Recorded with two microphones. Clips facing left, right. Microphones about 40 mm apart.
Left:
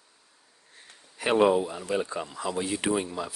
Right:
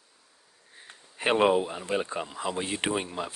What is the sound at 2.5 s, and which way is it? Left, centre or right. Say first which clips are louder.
Speech: left 3 dB; right.